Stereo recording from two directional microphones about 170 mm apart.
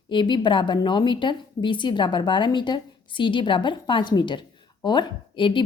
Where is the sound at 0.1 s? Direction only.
30° left (ahead or behind).